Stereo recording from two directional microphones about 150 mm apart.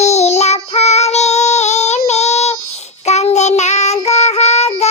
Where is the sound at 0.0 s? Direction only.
45° left (ahead or behind).